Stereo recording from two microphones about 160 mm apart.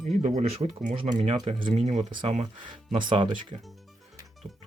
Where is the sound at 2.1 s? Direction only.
30° right (ahead or behind).